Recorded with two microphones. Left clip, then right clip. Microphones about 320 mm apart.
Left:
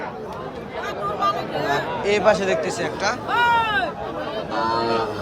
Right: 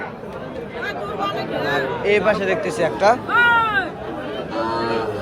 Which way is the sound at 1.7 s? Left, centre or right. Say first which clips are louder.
Right 3 dB; centre.